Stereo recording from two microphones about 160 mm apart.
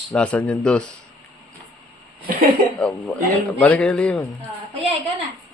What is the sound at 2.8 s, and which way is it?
Speech, 5° left (ahead or behind).